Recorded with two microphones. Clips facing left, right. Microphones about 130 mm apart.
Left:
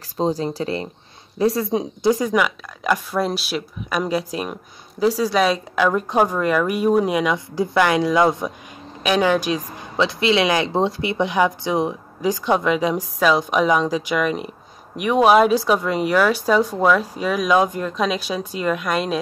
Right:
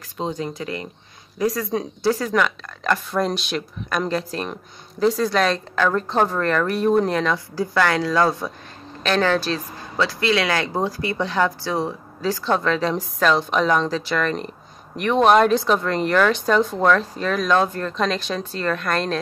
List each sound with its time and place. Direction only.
0.2 s a woman's voice: 35° left (ahead or behind); by 19.1 s 10° left (ahead or behind)